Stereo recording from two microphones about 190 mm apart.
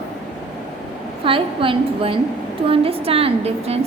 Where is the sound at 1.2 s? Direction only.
25° right (ahead or behind).